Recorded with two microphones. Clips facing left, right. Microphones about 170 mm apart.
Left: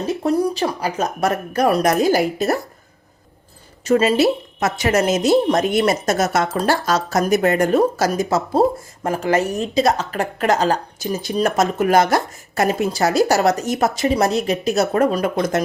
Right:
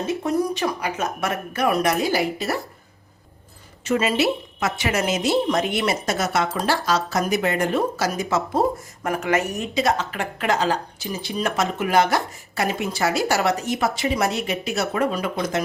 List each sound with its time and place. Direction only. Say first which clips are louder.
0.0 s speech: left 4 dB; 35° left (ahead or behind)
3.8 s speech: left 5 dB; 35° left (ahead or behind)